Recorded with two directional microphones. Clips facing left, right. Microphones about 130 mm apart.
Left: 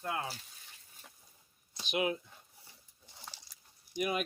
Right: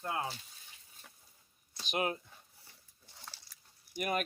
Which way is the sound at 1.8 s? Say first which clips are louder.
Left 1 dB; 45° right (ahead or behind).